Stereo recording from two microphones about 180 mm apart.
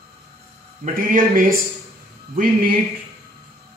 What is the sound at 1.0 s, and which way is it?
Speech, 50° right (ahead or behind).